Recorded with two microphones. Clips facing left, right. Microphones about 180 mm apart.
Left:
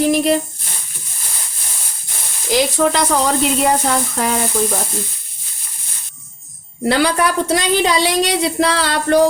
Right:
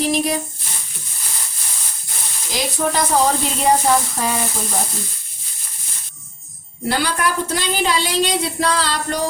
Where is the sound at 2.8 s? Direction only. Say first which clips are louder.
Left 3 dB; 60° left (ahead or behind).